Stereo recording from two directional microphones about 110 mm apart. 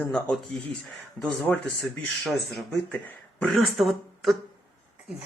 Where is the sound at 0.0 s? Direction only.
5° left (ahead or behind).